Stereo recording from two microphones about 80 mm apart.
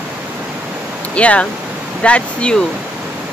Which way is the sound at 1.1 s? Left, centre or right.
Centre.